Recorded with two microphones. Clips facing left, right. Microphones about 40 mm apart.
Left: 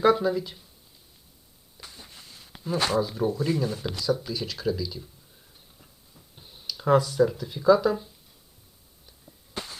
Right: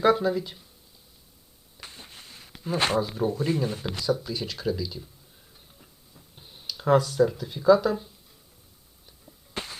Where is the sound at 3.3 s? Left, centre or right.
Right.